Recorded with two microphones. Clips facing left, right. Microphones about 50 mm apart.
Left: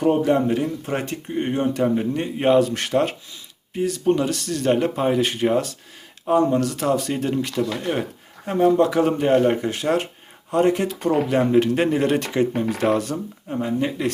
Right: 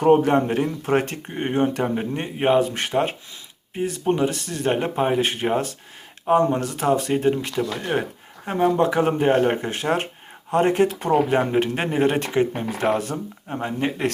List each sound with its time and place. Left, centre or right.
0.0 s speech: right